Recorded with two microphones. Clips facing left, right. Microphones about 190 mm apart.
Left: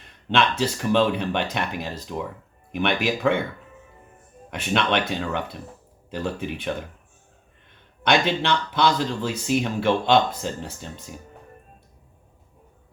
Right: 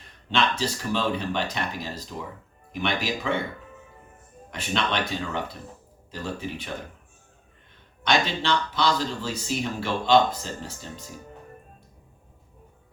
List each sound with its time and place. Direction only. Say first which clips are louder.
0.3 s speech: left 3 dB; 60° left (ahead or behind)
4.5 s speech: left 4 dB; 60° left (ahead or behind)
8.0 s speech: left 3 dB; 60° left (ahead or behind)